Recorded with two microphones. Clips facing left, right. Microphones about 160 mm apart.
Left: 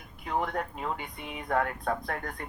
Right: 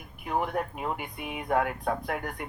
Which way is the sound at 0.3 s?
15° right (ahead or behind).